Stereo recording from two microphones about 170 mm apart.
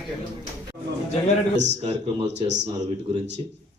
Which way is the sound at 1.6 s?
40° right (ahead or behind).